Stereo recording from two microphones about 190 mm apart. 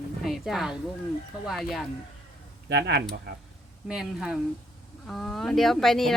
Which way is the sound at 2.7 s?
60° right (ahead or behind).